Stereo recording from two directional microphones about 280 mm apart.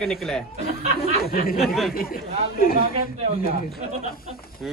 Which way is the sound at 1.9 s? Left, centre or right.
Left.